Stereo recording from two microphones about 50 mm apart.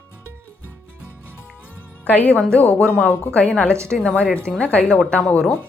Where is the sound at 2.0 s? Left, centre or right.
Left.